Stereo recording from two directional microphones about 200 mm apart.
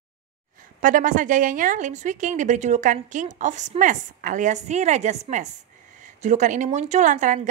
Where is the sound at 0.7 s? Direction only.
40° right (ahead or behind).